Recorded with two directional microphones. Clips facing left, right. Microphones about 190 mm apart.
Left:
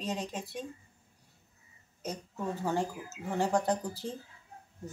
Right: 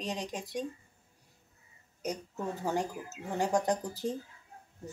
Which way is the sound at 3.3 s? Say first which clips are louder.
Even; 15° right (ahead or behind).